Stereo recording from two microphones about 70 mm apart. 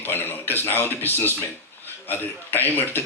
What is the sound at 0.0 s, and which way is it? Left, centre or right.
A man's voice, left.